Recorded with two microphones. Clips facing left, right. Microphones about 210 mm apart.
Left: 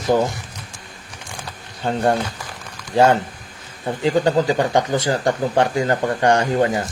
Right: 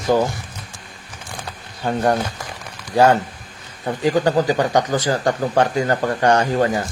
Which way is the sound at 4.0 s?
25° left (ahead or behind).